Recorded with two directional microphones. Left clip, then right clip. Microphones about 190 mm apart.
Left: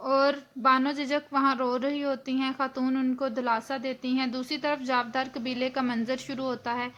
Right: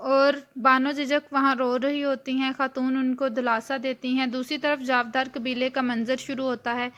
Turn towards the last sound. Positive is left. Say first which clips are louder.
# right 4 dB
turn(degrees=-25)  # may be behind; listen again after turning